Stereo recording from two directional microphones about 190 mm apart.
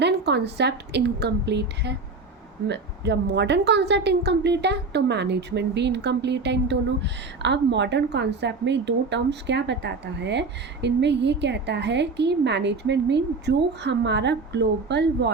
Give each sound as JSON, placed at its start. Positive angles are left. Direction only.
{"t": 0.0, "sound": "a woman's voice", "side_deg": -65}